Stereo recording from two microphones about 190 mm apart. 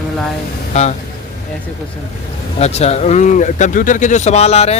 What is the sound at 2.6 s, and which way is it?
A man's voice, 35° left (ahead or behind).